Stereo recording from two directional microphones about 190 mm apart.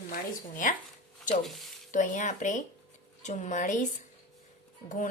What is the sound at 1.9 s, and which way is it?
Speech, 40° left (ahead or behind).